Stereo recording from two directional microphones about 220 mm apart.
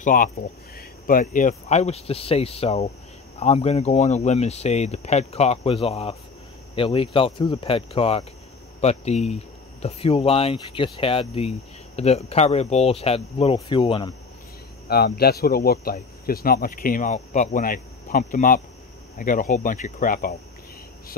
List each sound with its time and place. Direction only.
0.0 s speech: 40° left (ahead or behind); by 14.1 s 25° left (ahead or behind)
14.9 s speech: 45° left (ahead or behind)